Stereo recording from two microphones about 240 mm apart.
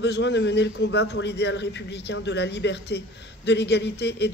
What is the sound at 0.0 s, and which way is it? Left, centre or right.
A man's voice, left.